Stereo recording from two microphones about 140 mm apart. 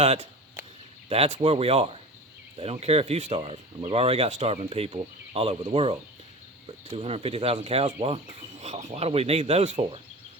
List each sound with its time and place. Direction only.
0.0 s speech: 45° right (ahead or behind)